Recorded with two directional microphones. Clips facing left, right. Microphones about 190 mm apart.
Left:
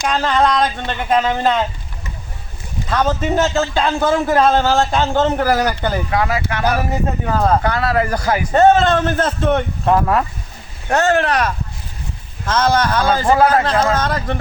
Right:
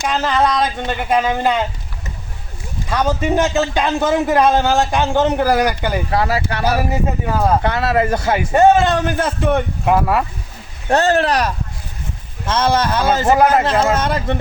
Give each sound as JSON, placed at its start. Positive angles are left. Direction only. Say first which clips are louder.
{"t": 0.1, "sound": "a man's voice", "louder": "left 1 dB", "side_deg": -5}
{"t": 2.9, "sound": "a man's voice", "louder": "even", "side_deg": -15}
{"t": 6.1, "sound": "speech", "louder": "right 1 dB", "side_deg": -35}
{"t": 6.7, "sound": "a man's voice", "louder": "right 1 dB", "side_deg": -10}
{"t": 7.6, "sound": "a man's voice", "louder": "right 1 dB", "side_deg": -20}
{"t": 8.5, "sound": "a man's voice", "louder": "even", "side_deg": -10}
{"t": 10.8, "sound": "a man's voice", "louder": "right 1 dB", "side_deg": -35}